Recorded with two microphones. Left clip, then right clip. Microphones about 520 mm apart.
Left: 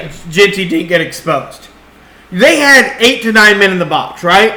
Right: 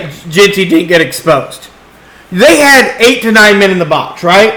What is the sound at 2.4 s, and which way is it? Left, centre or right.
A man's voice, right.